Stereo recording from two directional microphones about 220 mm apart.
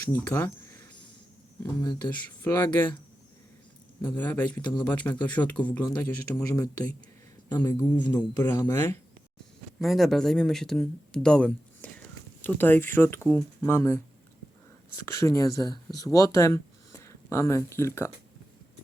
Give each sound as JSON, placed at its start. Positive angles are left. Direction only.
{"t": 0.1, "sound": "speech", "side_deg": 10}
{"t": 2.0, "sound": "speech", "side_deg": 10}
{"t": 4.1, "sound": "speech", "side_deg": 10}
{"t": 8.4, "sound": "speech", "side_deg": 10}
{"t": 15.0, "sound": "speech", "side_deg": 15}